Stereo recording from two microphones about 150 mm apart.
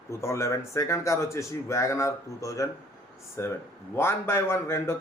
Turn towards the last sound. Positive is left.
turn(degrees=15)  # may be behind; listen again after turning